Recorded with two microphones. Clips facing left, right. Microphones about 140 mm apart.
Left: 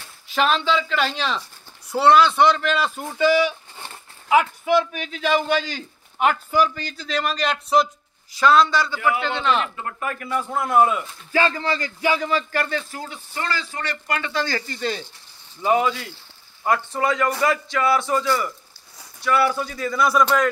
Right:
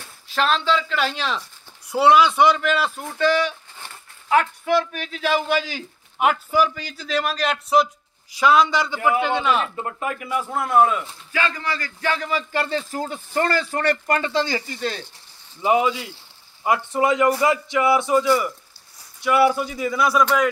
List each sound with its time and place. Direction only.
0.3 s a man's voice: centre (ahead or behind)
9.8 s a man's voice: 20° right (ahead or behind); by 11.0 s centre (ahead or behind)
11.3 s speech: 30° left (ahead or behind)
12.0 s speech: 10° left (ahead or behind)
12.5 s a man's voice: 30° right (ahead or behind); by 14.2 s 50° right (ahead or behind)
14.2 s speech: 25° right (ahead or behind)
14.7 s a man's voice: centre (ahead or behind)
15.6 s a man's voice: 10° right (ahead or behind)